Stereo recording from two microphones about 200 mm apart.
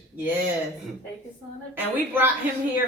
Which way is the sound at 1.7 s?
10° right (ahead or behind).